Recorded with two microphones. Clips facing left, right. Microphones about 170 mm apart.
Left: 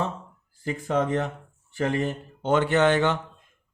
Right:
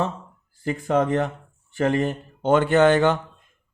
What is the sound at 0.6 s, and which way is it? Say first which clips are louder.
Speech: right 4 dB; 60° right (ahead or behind).